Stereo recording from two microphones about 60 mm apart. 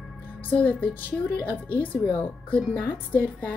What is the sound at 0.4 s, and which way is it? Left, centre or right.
A woman's voice, left.